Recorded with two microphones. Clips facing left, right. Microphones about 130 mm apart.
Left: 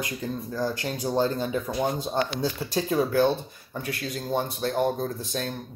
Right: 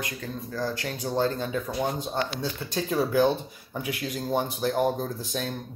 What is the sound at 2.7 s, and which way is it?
Speech, centre (ahead or behind).